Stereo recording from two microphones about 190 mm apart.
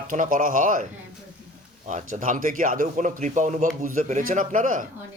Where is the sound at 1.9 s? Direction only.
40° right (ahead or behind).